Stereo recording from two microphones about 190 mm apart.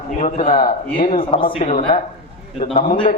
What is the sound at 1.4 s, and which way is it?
A man's voice, 30° left (ahead or behind).